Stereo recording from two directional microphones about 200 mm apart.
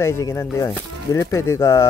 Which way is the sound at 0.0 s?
10° left (ahead or behind).